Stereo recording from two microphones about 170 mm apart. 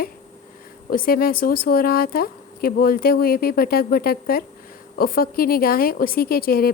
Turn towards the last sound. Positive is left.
turn(degrees=60)  # may be behind; listen again after turning